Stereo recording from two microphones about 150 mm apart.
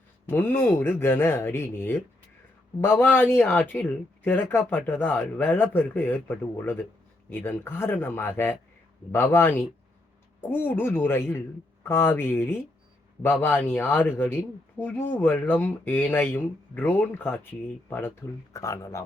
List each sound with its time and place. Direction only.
0.3 s speech: 15° left (ahead or behind)